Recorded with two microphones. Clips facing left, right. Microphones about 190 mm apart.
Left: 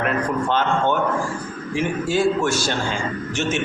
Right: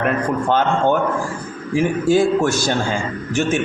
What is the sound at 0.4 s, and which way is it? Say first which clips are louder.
A man's voice: right 5 dB; 45° right (ahead or behind).